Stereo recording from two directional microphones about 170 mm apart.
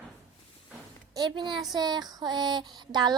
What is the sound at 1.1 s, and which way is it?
Speech, 25° right (ahead or behind).